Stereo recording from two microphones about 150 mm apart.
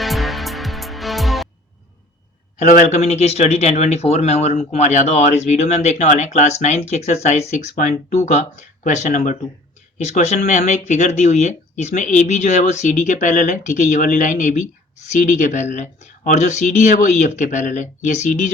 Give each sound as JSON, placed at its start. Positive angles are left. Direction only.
{"t": 0.0, "sound": "music", "side_deg": 0}
{"t": 2.6, "sound": "speech", "side_deg": 55}
{"t": 3.0, "sound": "speech", "side_deg": 45}